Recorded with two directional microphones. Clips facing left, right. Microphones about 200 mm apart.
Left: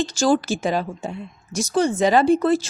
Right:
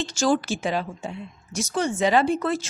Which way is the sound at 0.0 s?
35° left (ahead or behind).